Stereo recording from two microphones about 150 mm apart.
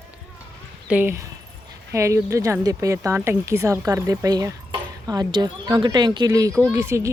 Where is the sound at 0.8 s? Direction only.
15° right (ahead or behind).